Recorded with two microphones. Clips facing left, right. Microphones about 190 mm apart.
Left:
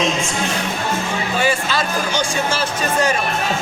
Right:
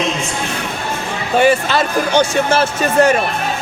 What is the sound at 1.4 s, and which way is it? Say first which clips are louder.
Speech: right 8 dB; 60° right (ahead or behind).